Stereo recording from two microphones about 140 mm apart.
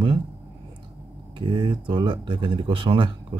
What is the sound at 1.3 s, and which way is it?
Speech, 35° right (ahead or behind).